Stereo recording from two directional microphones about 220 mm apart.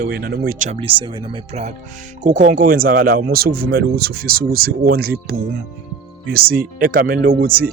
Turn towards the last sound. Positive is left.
turn(degrees=-40)  # may be behind; listen again after turning